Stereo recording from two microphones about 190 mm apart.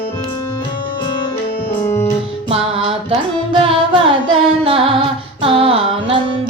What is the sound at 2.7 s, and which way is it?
Music, 30° right (ahead or behind).